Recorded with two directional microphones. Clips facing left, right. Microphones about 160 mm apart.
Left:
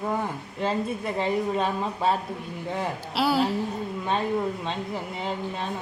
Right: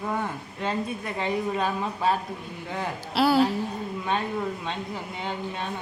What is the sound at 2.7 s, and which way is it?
Speech, centre (ahead or behind).